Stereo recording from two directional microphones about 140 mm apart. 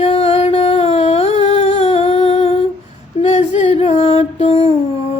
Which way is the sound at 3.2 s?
50° left (ahead or behind).